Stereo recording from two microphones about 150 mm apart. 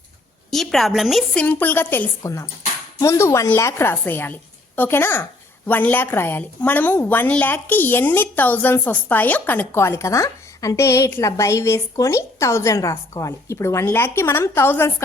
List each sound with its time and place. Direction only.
0.5 s a woman's voice: centre (ahead or behind); by 15.0 s 15° left (ahead or behind)